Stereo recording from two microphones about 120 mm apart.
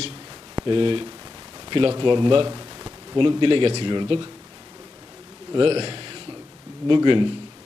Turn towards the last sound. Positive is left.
turn(degrees=-45)  # may be behind; listen again after turning